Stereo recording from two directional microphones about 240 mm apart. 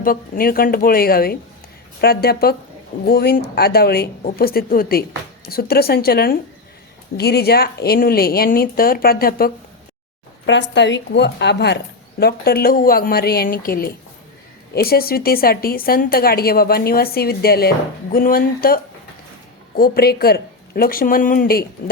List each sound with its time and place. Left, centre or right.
0.0 s a woman's voice: left